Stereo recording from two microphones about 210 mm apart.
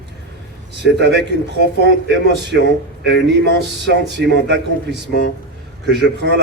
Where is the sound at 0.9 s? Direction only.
55° right (ahead or behind).